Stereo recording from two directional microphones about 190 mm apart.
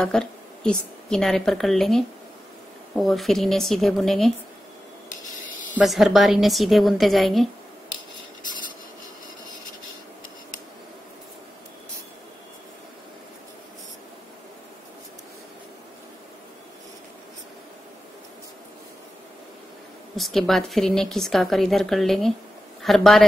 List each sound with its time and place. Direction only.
0.0 s speech: 5° left (ahead or behind)
5.8 s speech: centre (ahead or behind)
20.2 s a man's voice: centre (ahead or behind)